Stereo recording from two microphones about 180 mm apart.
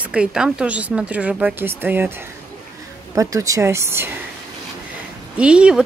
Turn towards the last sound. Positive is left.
turn(degrees=-5)  # may be behind; listen again after turning